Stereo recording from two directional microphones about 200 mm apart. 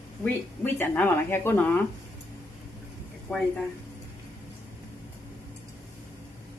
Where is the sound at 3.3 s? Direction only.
5° left (ahead or behind).